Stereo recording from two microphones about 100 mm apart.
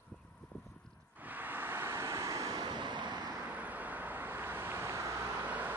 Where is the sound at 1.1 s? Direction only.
15° right (ahead or behind); by 3.3 s 45° right (ahead or behind).